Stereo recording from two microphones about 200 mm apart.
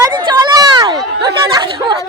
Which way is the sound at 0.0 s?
20° right (ahead or behind).